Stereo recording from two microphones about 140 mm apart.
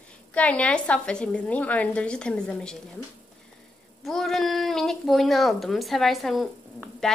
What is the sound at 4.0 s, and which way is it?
Speech, centre (ahead or behind).